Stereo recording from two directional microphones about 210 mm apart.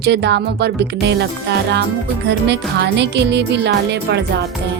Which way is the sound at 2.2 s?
55° right (ahead or behind).